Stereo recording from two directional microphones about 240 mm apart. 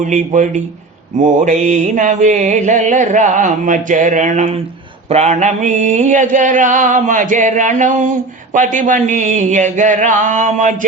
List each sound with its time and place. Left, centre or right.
0.0 s mantra: right